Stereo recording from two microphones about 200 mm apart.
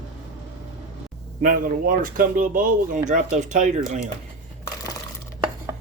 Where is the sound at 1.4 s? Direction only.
45° right (ahead or behind).